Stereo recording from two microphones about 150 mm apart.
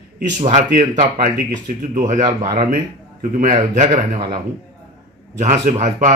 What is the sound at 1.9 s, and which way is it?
Speech, 55° right (ahead or behind).